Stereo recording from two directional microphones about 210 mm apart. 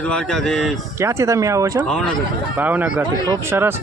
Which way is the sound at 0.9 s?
15° right (ahead or behind).